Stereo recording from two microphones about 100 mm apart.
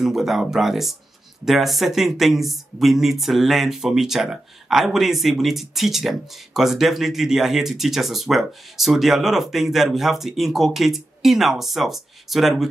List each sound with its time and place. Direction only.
0.0 s speech: 5° right (ahead or behind)